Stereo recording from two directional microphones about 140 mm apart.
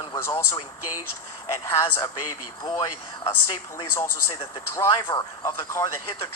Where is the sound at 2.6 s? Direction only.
35° left (ahead or behind).